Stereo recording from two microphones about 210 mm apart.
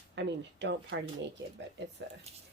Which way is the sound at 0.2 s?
55° right (ahead or behind).